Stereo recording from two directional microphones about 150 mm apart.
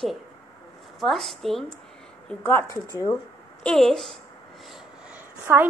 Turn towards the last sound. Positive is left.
turn(degrees=-10)  # may be behind; listen again after turning